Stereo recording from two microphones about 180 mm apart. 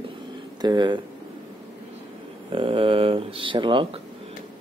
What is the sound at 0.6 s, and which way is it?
Speech, 25° right (ahead or behind).